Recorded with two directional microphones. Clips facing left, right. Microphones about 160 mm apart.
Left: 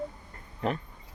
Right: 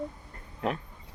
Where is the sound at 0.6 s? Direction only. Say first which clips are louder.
Left 1 dB; centre (ahead or behind).